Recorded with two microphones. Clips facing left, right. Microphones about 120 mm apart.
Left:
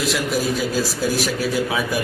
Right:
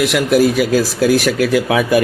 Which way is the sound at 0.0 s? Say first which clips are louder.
Right 9 dB; 65° right (ahead or behind).